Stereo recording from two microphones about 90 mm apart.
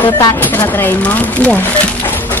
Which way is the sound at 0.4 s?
20° left (ahead or behind).